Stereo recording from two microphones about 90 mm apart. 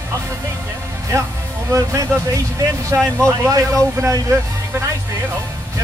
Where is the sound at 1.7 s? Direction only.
35° right (ahead or behind).